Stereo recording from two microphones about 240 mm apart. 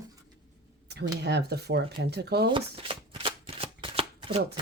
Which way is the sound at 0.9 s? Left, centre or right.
Right.